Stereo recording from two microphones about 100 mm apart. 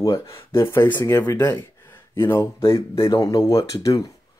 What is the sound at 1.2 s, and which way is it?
Speech, 40° left (ahead or behind).